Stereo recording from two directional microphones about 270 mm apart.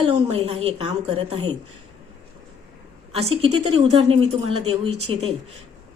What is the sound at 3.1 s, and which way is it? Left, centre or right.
A woman's voice, right.